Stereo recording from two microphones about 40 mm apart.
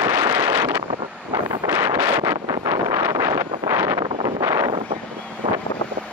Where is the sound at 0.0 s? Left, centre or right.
Right.